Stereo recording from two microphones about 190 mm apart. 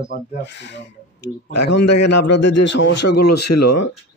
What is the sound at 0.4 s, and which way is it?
Speech, 70° left (ahead or behind).